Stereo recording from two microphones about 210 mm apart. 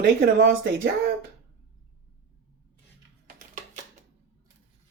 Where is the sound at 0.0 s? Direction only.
50° right (ahead or behind).